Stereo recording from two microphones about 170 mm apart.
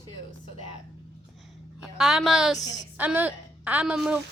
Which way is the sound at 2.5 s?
20° left (ahead or behind).